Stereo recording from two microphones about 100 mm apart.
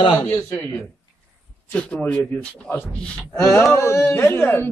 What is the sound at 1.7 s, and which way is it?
Speech, 10° left (ahead or behind).